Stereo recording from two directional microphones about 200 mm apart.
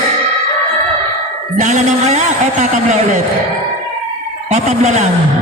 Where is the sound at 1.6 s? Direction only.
35° right (ahead or behind).